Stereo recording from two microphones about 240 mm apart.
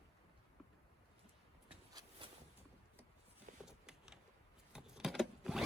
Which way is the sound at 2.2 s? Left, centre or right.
Right.